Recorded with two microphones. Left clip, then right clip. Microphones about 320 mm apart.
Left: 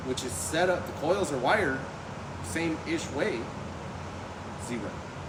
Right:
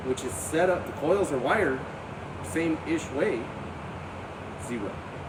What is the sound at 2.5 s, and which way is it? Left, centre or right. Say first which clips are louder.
Speech: right 3 dB; centre.